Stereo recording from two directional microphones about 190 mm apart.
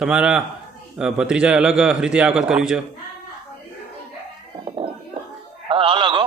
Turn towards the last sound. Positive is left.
turn(degrees=-25)  # may be behind; listen again after turning